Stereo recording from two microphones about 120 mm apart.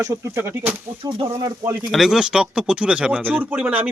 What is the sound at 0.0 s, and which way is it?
Speech, 25° right (ahead or behind).